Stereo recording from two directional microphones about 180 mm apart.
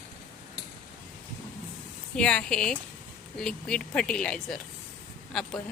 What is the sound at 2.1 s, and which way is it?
Speech, 5° left (ahead or behind).